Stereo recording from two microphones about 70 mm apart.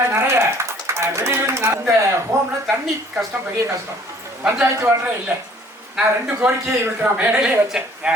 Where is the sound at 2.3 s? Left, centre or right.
Right.